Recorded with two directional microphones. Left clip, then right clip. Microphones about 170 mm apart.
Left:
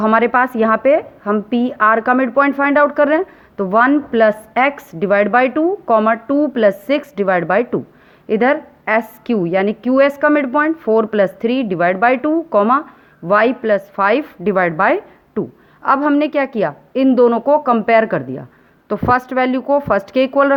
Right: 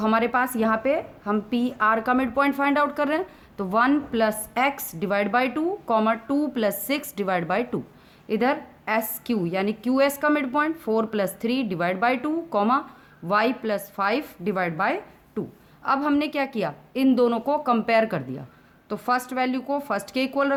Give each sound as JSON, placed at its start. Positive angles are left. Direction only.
{"t": 0.0, "sound": "a woman's voice", "side_deg": 30}